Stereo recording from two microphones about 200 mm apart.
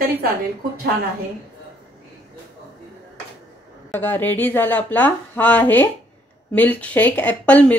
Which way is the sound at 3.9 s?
10° left (ahead or behind).